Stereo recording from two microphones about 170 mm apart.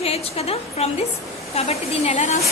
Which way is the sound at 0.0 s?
35° left (ahead or behind).